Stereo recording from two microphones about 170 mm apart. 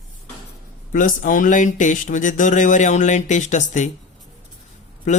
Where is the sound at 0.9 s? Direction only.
50° left (ahead or behind).